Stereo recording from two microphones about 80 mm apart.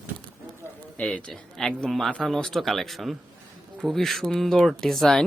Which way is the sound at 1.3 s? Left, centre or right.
Centre.